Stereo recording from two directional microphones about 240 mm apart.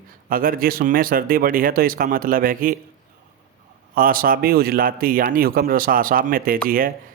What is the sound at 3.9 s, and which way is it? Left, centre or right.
A man's voice, right.